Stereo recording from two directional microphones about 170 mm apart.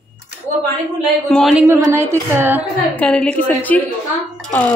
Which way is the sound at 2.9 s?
5° left (ahead or behind).